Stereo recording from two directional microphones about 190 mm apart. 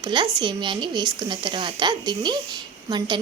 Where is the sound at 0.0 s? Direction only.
25° right (ahead or behind).